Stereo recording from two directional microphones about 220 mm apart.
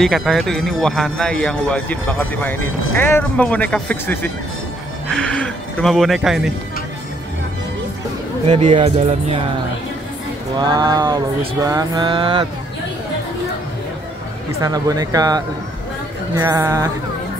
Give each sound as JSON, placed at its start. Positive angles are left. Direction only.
{"t": 0.0, "sound": "speech", "side_deg": 0}
{"t": 2.6, "sound": "speech", "side_deg": 70}
{"t": 3.0, "sound": "speech", "side_deg": 10}
{"t": 8.5, "sound": "a sound", "side_deg": -25}
{"t": 10.6, "sound": "a sound", "side_deg": -20}
{"t": 14.6, "sound": "speech", "side_deg": -15}